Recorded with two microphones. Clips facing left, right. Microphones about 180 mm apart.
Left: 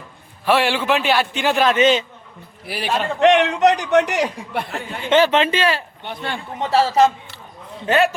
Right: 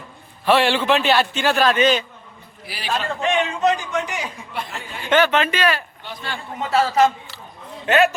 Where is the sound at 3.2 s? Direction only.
70° left (ahead or behind).